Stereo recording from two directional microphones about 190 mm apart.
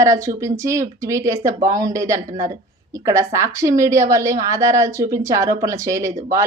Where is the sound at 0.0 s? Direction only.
15° right (ahead or behind).